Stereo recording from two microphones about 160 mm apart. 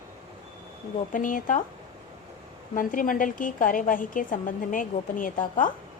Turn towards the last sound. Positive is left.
turn(degrees=55)  # may be behind; listen again after turning